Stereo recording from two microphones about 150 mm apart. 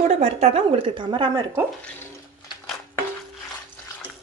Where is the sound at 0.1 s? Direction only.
45° right (ahead or behind).